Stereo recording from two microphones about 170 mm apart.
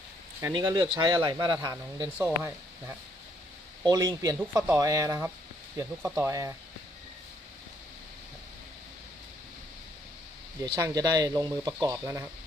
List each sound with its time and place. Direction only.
0.4 s speech: 20° right (ahead or behind)
2.1 s speech: 10° right (ahead or behind)
10.6 s speech: 20° right (ahead or behind)